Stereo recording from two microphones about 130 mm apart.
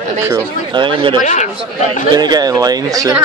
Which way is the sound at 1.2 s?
70° left (ahead or behind).